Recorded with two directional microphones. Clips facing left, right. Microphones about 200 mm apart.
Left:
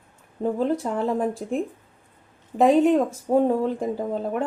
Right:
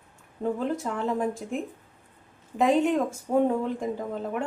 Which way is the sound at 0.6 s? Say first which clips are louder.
Left 5 dB; 35° left (ahead or behind).